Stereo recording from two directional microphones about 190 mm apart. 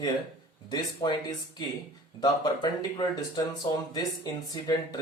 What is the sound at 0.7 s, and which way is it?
Speech, 20° left (ahead or behind).